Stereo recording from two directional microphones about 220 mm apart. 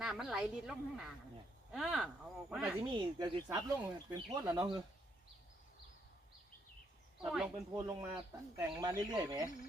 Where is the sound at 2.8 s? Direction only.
20° right (ahead or behind).